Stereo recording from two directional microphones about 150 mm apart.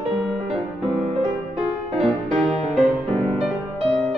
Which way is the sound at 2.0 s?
Centre (ahead or behind).